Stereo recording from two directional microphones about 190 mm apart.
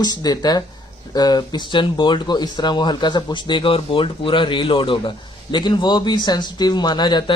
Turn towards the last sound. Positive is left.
turn(degrees=25)  # may be behind; listen again after turning